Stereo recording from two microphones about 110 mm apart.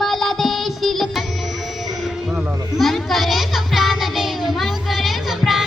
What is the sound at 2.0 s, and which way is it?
Children playing, centre (ahead or behind).